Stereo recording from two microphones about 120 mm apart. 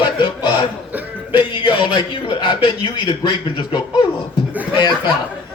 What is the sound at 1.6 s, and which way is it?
A man's voice, 45° left (ahead or behind).